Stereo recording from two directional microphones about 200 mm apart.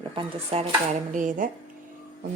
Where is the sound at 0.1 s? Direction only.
30° right (ahead or behind).